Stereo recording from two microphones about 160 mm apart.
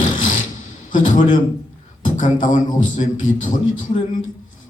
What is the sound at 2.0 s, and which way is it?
A man's voice, 55° left (ahead or behind).